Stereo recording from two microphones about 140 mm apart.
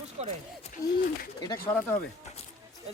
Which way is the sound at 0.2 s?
50° right (ahead or behind).